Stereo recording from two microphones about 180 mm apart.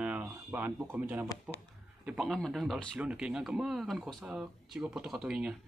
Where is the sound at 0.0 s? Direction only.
10° right (ahead or behind).